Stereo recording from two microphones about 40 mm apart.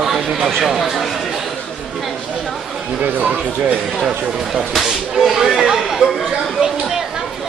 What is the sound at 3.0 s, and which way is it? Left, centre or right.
Speech, right.